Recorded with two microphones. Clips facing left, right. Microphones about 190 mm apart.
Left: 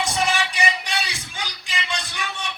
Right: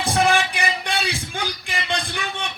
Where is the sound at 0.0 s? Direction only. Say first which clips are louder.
Right 4 dB; 55° right (ahead or behind).